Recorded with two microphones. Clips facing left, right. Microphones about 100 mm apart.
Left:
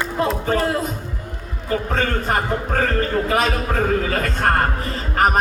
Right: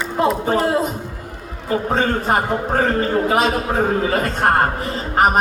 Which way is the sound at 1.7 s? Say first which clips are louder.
Right 3 dB; 25° right (ahead or behind).